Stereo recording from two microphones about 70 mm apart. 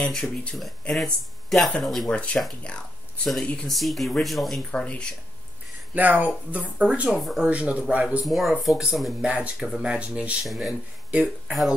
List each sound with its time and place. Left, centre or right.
0.0 s speech: centre
0.6 s speech: centre
2.0 s speech: centre
3.6 s speech: centre
4.6 s speech: centre
5.9 s speech: right
7.2 s speech: centre
7.4 s speech: centre
8.3 s speech: centre
9.2 s speech: centre
10.4 s speech: centre
11.1 s speech: centre